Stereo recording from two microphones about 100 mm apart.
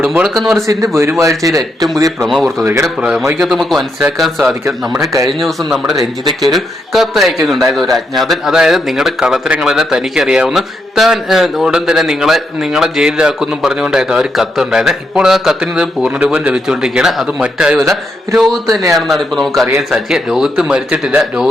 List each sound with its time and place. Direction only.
0.0 s speech: 5° right (ahead or behind)
0.5 s speech: 30° right (ahead or behind)
2.2 s a man's voice: centre (ahead or behind)
3.0 s speech: 10° right (ahead or behind)
3.3 s a man's voice: centre (ahead or behind)